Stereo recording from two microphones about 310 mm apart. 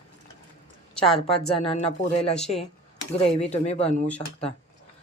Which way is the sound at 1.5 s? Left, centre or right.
Centre.